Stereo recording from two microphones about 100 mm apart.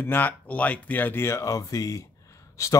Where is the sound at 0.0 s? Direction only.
20° left (ahead or behind).